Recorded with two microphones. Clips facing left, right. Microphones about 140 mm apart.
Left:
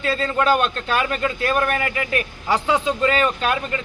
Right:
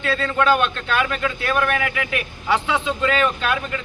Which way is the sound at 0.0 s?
35° left (ahead or behind).